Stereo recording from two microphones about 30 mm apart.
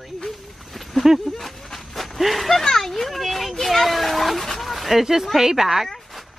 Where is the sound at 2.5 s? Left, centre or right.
Centre.